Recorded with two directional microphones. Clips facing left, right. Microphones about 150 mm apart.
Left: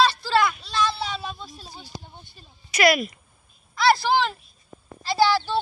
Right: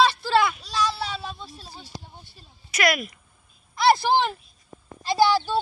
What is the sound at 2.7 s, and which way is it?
Speech, centre (ahead or behind).